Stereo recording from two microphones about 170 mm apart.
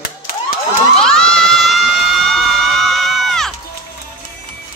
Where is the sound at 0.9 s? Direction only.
5° left (ahead or behind).